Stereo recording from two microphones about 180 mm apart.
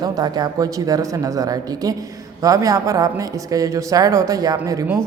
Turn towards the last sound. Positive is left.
turn(degrees=-15)  # may be behind; listen again after turning